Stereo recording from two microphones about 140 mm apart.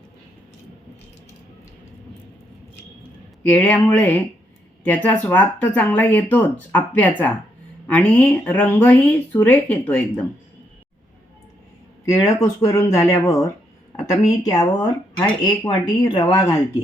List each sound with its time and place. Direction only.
3.5 s speech: 10° left (ahead or behind)
12.0 s speech: 20° left (ahead or behind)